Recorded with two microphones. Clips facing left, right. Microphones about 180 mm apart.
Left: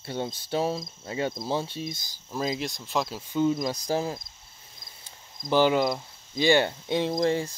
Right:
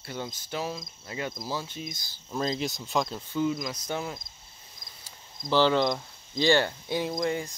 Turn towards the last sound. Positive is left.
turn(degrees=30)  # may be behind; listen again after turning